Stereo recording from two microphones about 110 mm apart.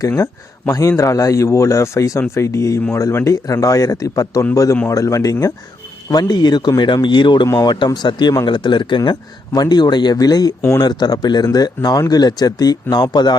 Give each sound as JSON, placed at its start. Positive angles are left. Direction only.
{"t": 0.7, "sound": "a man's voice", "side_deg": 30}
{"t": 7.4, "sound": "speech", "side_deg": 35}